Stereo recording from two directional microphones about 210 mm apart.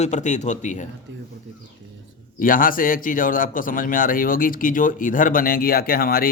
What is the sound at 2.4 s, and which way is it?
Speech, 40° left (ahead or behind).